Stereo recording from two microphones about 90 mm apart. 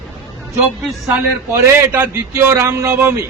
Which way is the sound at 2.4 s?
35° right (ahead or behind).